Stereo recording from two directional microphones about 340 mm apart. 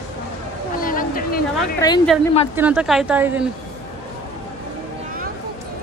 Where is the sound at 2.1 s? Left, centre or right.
Centre.